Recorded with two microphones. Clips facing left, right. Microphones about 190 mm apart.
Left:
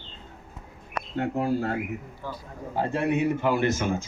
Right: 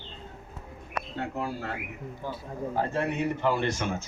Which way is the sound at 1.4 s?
45° left (ahead or behind).